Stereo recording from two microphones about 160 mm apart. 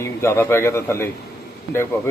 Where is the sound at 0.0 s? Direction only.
15° left (ahead or behind).